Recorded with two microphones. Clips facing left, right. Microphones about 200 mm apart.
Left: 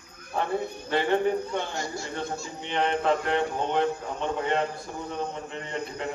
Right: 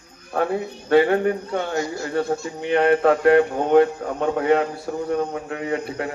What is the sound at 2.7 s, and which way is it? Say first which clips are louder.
A man's voice: right 8 dB; 65° right (ahead or behind).